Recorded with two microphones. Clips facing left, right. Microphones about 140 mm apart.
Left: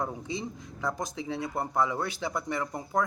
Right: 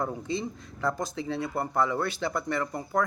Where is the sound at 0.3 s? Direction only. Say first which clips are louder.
Right 3 dB; 15° left (ahead or behind).